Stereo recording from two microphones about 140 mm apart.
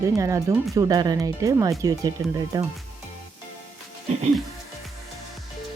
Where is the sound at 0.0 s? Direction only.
25° right (ahead or behind).